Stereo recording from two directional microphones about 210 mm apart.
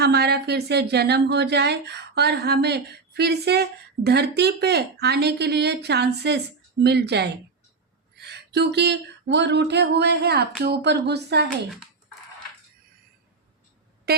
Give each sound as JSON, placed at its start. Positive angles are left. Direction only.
{"t": 0.0, "sound": "speech", "side_deg": -50}